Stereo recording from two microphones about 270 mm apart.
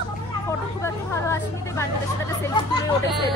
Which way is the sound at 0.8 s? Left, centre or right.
Centre.